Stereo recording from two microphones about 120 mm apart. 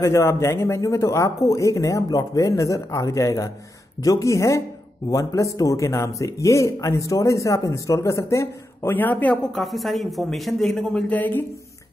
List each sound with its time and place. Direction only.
0.0 s speech: 25° left (ahead or behind)
9.5 s speech: centre (ahead or behind)